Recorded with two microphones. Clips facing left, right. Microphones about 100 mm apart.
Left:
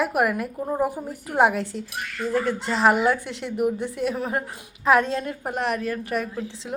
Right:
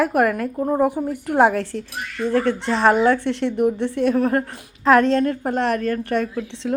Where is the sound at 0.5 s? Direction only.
20° right (ahead or behind).